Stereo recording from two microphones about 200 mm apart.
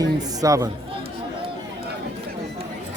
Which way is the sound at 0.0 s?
15° right (ahead or behind).